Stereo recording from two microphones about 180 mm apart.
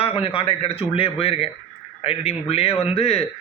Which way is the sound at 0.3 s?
35° left (ahead or behind).